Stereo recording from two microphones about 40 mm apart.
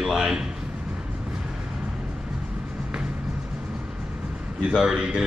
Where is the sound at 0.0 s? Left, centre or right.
Centre.